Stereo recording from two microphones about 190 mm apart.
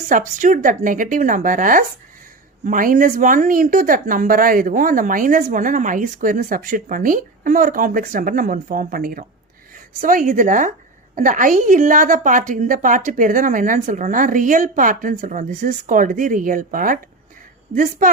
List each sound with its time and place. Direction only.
0.1 s a woman's voice: 45° right (ahead or behind)
18.0 s a woman's voice: 45° right (ahead or behind)